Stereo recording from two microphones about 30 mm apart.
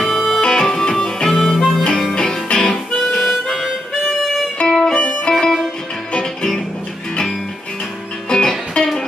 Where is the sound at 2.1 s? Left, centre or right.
Left.